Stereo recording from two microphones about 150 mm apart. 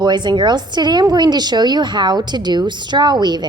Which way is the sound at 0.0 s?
30° right (ahead or behind).